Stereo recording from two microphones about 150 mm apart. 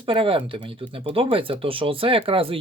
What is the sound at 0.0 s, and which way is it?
Speech, 35° right (ahead or behind).